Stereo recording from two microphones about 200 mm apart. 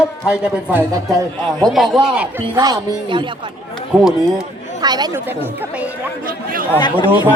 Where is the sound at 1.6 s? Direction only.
Centre (ahead or behind).